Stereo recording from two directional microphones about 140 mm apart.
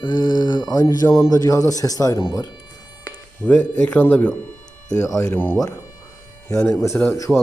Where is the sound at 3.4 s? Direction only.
10° left (ahead or behind).